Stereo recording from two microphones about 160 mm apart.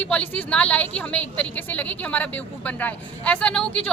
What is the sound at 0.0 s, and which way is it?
A woman's voice, 10° left (ahead or behind).